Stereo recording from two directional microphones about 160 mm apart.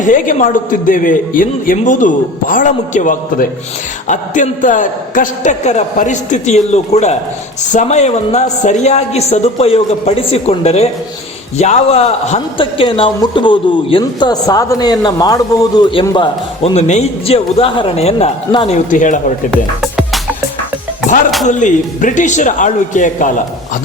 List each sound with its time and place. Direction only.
0.0 s a man's voice: 55° left (ahead or behind)
18.7 s a woman's voice: 50° left (ahead or behind)
19.5 s music: centre (ahead or behind)
21.4 s a woman's voice: 50° left (ahead or behind)